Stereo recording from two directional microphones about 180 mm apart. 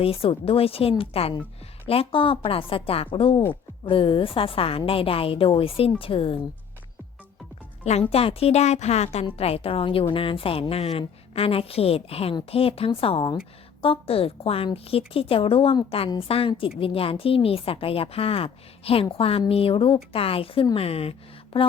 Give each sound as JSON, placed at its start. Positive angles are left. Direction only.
{"t": 0.0, "sound": "a woman's voice", "side_deg": 30}
{"t": 8.1, "sound": "a woman's voice", "side_deg": 35}